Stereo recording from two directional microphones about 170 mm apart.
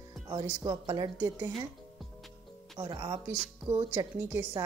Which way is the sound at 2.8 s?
20° right (ahead or behind).